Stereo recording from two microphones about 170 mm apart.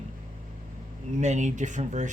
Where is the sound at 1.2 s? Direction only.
45° right (ahead or behind).